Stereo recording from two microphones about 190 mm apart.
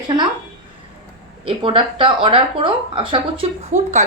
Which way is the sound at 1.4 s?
25° right (ahead or behind).